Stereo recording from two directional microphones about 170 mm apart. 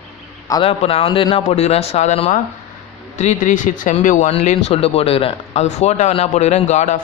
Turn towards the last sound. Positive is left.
turn(degrees=45)  # may be behind; listen again after turning